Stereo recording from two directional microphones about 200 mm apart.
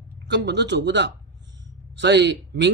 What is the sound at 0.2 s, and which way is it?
Speech, 60° right (ahead or behind).